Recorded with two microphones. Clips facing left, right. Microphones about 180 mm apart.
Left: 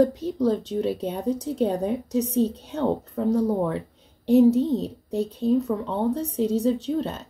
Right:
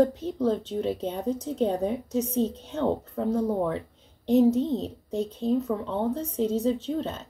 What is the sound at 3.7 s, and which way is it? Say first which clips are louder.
A woman's voice: left 2 dB; 10° left (ahead or behind).